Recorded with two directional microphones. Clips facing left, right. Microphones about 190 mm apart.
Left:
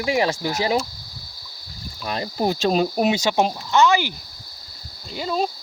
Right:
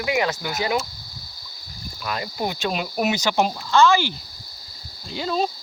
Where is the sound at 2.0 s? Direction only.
30° left (ahead or behind).